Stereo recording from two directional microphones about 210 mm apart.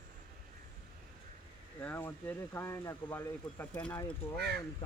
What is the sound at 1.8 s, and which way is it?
Speech, 10° left (ahead or behind).